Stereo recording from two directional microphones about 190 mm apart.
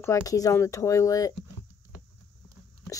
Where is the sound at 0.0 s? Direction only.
15° left (ahead or behind).